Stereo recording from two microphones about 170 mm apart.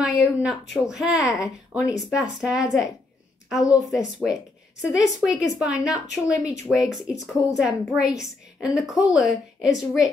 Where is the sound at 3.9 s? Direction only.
Centre (ahead or behind).